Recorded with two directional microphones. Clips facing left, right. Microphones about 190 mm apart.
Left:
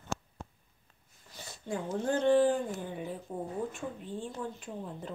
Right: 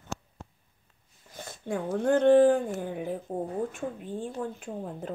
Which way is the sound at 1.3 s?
50° right (ahead or behind).